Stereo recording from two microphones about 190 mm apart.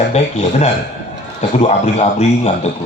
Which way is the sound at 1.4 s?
35° left (ahead or behind).